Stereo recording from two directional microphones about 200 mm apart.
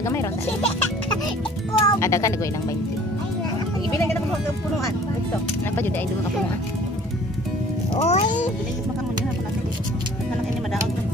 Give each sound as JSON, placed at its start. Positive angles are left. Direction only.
{"t": 0.0, "sound": "speech", "side_deg": 15}
{"t": 1.8, "sound": "speech", "side_deg": 15}
{"t": 7.9, "sound": "speech", "side_deg": 35}